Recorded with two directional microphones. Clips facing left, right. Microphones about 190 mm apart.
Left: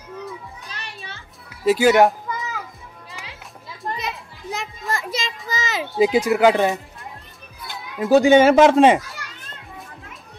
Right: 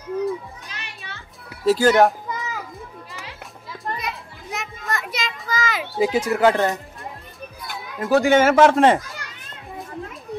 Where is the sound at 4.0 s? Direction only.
25° left (ahead or behind).